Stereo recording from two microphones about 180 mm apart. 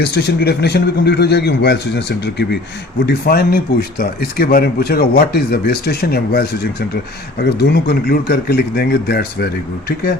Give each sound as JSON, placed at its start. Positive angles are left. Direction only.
{"t": 0.0, "sound": "a man's voice", "side_deg": 70}